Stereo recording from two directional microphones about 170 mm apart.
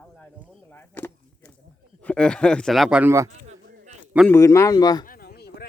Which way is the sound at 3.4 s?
45° right (ahead or behind).